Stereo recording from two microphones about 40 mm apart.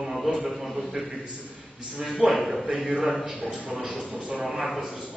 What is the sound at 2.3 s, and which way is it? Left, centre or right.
Speech, centre.